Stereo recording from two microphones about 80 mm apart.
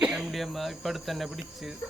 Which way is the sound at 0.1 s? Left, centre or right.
Centre.